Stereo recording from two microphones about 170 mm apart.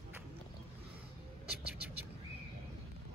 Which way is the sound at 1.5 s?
70° right (ahead or behind).